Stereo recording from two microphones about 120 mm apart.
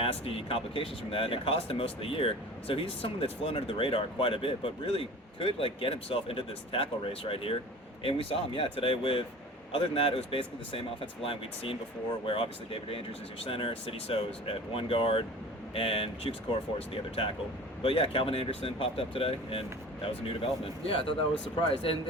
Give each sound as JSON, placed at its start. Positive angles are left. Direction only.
{"t": 0.0, "sound": "speech", "side_deg": 50}